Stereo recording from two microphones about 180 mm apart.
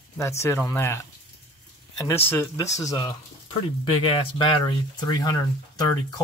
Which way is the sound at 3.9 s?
30° left (ahead or behind).